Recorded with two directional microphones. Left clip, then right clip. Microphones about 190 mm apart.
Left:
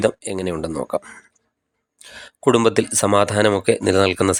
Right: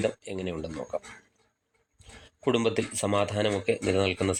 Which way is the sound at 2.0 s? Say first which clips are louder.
Left 11 dB; 40° left (ahead or behind).